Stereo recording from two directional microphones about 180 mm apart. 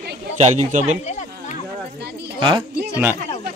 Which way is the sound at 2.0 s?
70° right (ahead or behind).